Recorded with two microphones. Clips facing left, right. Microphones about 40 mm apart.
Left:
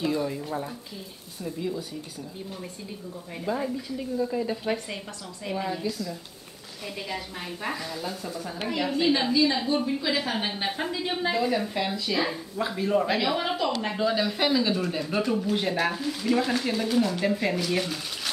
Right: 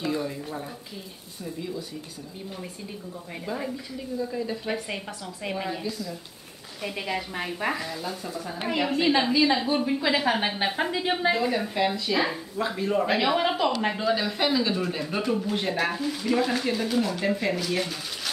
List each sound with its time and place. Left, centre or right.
0.0 s a sound: centre
1.4 s speech: centre
3.4 s speech: centre
4.8 s a woman's voice: centre
6.8 s a woman's voice: centre
11.3 s a woman's voice: centre
12.5 s a woman's voice: centre
13.9 s speech: centre